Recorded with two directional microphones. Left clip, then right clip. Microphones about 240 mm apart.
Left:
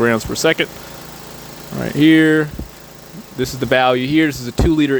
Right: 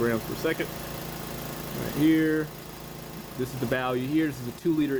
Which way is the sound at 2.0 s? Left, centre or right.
Left.